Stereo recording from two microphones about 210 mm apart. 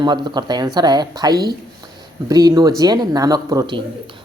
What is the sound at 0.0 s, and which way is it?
A woman's voice, 20° right (ahead or behind).